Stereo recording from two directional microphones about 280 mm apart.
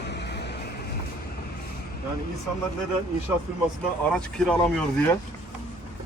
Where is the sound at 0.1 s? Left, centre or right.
Left.